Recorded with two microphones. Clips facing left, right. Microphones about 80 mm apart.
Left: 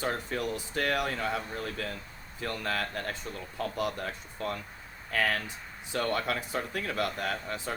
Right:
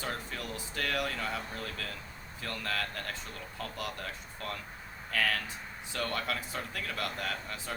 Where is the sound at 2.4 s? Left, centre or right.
Left.